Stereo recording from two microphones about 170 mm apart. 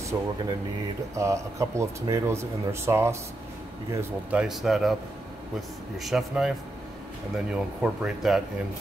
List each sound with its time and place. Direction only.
0.1 s speech: 15° right (ahead or behind)
4.3 s speech: 5° right (ahead or behind)
5.9 s speech: centre (ahead or behind)